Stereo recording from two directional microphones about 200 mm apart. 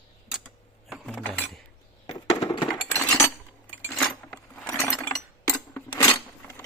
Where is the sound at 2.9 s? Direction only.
10° left (ahead or behind).